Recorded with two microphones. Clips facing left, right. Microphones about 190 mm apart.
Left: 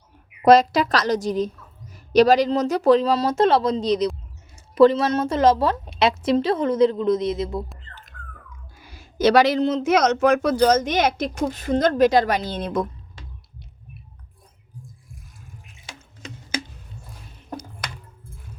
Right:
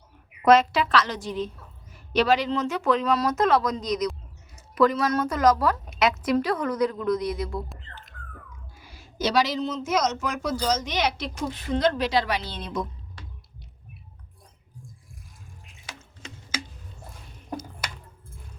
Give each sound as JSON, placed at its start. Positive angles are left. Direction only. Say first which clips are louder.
{"t": 0.4, "sound": "a woman's voice", "louder": "left 4 dB", "side_deg": 35}
{"t": 8.9, "sound": "speech", "louder": "left 9 dB", "side_deg": 55}